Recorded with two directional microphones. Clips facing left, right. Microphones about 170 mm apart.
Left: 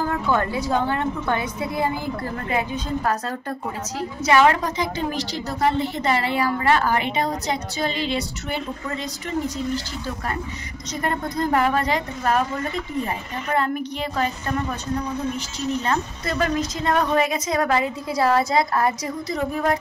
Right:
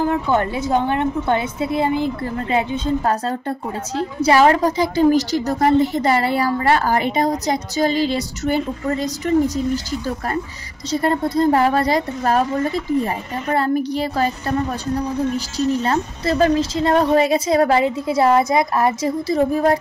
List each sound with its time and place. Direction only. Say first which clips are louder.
0.0 s a woman's voice: right 4 dB; 20° right (ahead or behind); by 9.3 s 40° right (ahead or behind)
10.9 s a woman's voice: right 7 dB; 30° right (ahead or behind)